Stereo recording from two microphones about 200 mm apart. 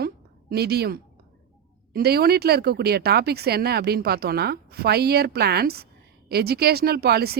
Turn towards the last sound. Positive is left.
turn(degrees=-50)  # may be behind; listen again after turning